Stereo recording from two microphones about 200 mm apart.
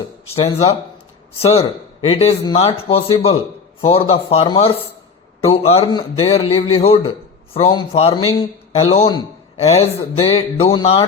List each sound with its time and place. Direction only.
0.3 s a man's voice: 30° left (ahead or behind)